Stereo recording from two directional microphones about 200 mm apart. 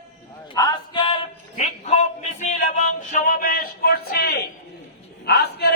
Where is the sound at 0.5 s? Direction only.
20° left (ahead or behind).